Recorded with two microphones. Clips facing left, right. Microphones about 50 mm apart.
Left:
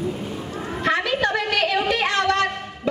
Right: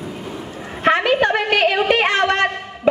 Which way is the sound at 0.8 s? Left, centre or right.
Right.